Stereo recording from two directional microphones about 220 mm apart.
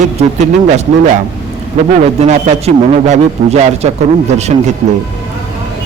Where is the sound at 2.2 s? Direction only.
30° right (ahead or behind).